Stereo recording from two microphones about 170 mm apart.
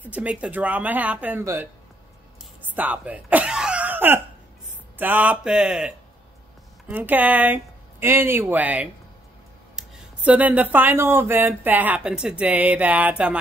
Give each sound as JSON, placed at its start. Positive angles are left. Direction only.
{"t": 0.0, "sound": "speech", "side_deg": -10}
{"t": 2.7, "sound": "throat clearing", "side_deg": -10}
{"t": 4.9, "sound": "speech", "side_deg": -10}